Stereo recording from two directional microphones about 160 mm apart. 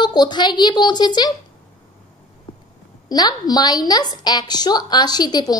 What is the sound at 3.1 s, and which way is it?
A woman's voice, 25° left (ahead or behind).